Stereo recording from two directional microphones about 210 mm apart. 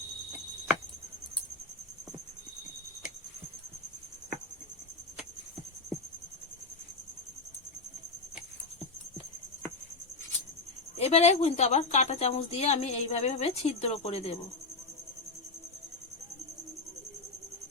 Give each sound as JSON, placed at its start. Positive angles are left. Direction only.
{"t": 10.9, "sound": "a woman's voice", "side_deg": 30}